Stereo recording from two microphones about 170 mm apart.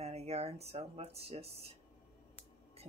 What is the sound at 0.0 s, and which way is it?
Speech, 40° right (ahead or behind).